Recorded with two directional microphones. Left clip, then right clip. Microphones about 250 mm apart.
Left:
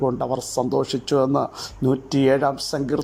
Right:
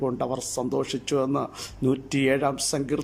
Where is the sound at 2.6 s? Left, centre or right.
Right.